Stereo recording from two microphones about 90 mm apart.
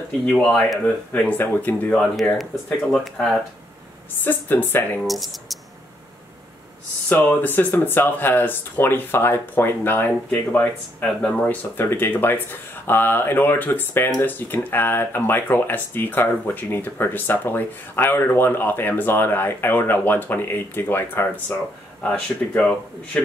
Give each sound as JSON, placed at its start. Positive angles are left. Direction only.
{"t": 0.3, "sound": "speech", "side_deg": 5}
{"t": 1.1, "sound": "speech", "side_deg": 15}
{"t": 2.3, "sound": "speech", "side_deg": 0}
{"t": 4.2, "sound": "speech", "side_deg": 20}
{"t": 5.0, "sound": "speech", "side_deg": 0}
{"t": 7.1, "sound": "speech", "side_deg": 20}